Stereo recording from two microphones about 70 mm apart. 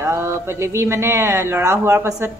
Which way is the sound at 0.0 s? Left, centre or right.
Right.